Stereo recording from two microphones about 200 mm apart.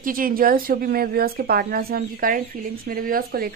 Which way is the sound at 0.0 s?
45° right (ahead or behind).